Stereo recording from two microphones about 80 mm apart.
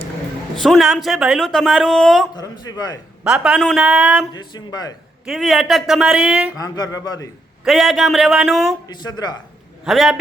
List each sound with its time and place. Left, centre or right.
0.5 s a man's voice: centre
2.3 s speech: left
3.2 s a woman's voice: centre
4.4 s speech: left
5.2 s a woman's voice: centre
6.6 s speech: left
7.6 s a man's voice: centre
8.9 s speech: left
9.8 s a man's voice: centre